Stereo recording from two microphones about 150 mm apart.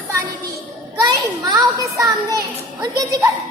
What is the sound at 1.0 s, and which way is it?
A child's voice, 25° right (ahead or behind).